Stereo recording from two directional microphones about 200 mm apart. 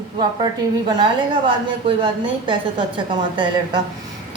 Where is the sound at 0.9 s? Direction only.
20° right (ahead or behind).